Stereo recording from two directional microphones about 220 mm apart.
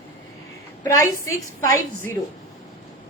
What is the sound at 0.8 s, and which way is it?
A woman's voice, 15° left (ahead or behind).